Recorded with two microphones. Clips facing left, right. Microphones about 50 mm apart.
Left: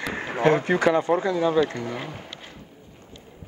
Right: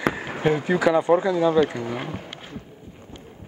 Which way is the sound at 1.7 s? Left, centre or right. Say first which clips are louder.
Right 2 dB; centre.